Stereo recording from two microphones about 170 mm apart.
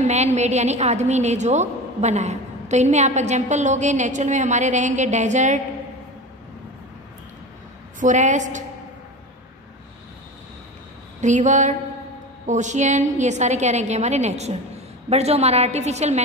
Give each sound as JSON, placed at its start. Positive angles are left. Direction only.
{"t": 0.0, "sound": "a woman's voice", "side_deg": -40}
{"t": 8.0, "sound": "a woman's voice", "side_deg": -45}
{"t": 11.1, "sound": "a woman's voice", "side_deg": -45}